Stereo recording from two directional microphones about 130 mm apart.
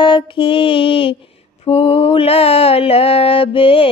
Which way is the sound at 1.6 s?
50° left (ahead or behind).